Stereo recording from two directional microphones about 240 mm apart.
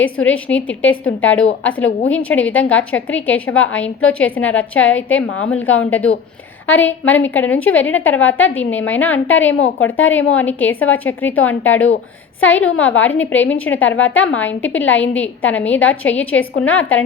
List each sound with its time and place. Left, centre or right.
0.0 s a woman's voice: centre
1.0 s a woman's voice: left
2.0 s a woman's voice: centre